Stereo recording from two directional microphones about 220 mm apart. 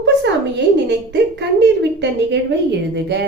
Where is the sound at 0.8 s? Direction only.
50° right (ahead or behind).